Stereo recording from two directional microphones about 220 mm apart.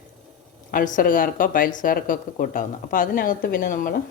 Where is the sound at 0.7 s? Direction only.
40° left (ahead or behind).